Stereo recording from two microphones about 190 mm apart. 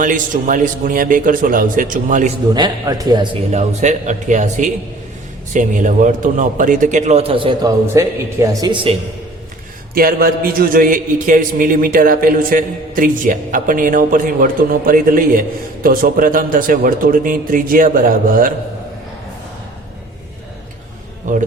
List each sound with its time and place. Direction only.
0.0 s a man's voice: 45° right (ahead or behind)
2.6 s speech: 20° right (ahead or behind)
3.5 s a man's voice: 35° right (ahead or behind)
9.9 s a man's voice: 50° right (ahead or behind)
21.3 s speech: 40° right (ahead or behind)